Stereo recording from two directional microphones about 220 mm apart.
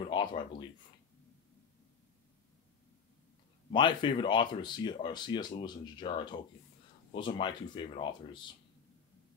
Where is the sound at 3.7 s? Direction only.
20° left (ahead or behind).